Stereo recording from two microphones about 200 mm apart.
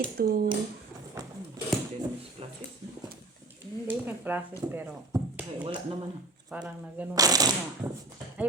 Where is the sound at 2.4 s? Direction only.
30° right (ahead or behind).